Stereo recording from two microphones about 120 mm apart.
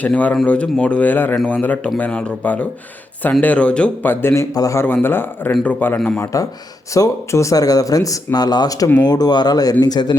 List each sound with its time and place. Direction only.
0.0 s speech: 10° left (ahead or behind)
6.3 s speech: 25° left (ahead or behind)